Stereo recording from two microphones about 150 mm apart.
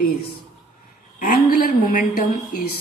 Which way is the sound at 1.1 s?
75° left (ahead or behind).